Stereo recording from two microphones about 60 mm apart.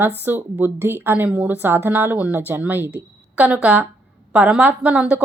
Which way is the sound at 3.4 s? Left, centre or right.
Centre.